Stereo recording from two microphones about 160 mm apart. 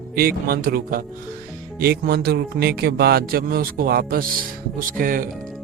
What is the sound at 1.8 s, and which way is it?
Speech, 75° right (ahead or behind).